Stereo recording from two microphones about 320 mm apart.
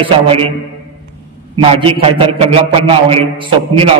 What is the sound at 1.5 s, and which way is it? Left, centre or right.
A man's voice, centre.